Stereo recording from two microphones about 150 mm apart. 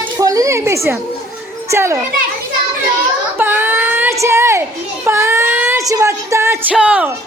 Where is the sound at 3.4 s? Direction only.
15° right (ahead or behind).